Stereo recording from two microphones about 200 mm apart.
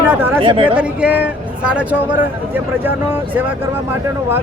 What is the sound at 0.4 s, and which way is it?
Speech, 25° right (ahead or behind).